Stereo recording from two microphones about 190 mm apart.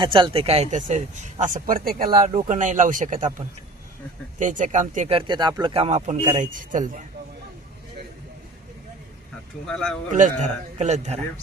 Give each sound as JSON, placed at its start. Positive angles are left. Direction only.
{"t": 0.0, "sound": "a man's voice", "side_deg": -25}
{"t": 5.1, "sound": "speech", "side_deg": -25}
{"t": 9.6, "sound": "speech", "side_deg": 5}
{"t": 10.1, "sound": "a man's voice", "side_deg": -40}